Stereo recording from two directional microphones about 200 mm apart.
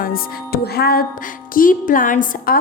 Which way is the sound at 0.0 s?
45° left (ahead or behind).